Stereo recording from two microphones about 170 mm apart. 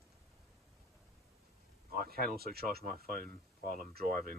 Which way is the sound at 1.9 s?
60° right (ahead or behind).